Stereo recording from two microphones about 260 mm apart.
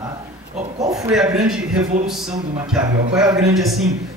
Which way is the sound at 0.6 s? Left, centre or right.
Centre.